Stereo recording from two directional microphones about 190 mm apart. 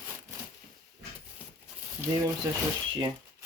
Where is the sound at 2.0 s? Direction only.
15° right (ahead or behind).